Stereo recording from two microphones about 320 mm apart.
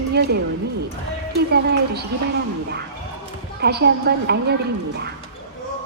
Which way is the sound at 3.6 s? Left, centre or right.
Right.